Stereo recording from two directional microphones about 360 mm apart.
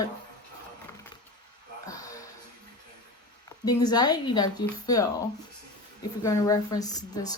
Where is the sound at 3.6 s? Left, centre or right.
Centre.